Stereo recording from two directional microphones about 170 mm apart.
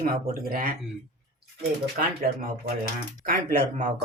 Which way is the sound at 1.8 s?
60° right (ahead or behind).